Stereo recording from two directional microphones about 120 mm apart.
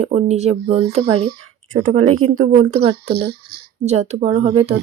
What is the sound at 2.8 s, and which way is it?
Speech, 55° right (ahead or behind).